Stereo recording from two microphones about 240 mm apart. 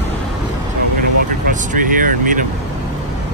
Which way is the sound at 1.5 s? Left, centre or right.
Right.